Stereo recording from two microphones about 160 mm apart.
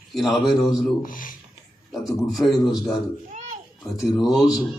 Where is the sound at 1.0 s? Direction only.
60° left (ahead or behind).